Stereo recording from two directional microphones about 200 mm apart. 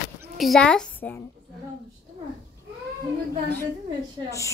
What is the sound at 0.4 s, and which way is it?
Speech, centre (ahead or behind).